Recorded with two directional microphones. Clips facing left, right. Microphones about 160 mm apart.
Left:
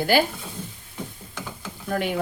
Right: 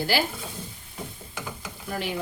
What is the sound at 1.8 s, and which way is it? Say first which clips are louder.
Stir: left 5 dB; 55° left (ahead or behind).